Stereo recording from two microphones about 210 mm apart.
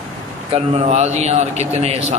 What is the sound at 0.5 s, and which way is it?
Speech, 30° right (ahead or behind).